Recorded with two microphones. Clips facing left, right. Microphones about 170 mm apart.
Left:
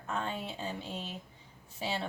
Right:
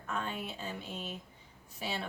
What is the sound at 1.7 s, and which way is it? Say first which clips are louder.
Speech: left 3 dB; 25° left (ahead or behind).